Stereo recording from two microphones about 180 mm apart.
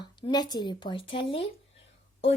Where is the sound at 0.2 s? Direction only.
25° left (ahead or behind).